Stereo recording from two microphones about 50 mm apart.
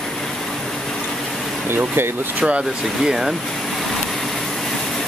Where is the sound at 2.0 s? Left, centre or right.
Right.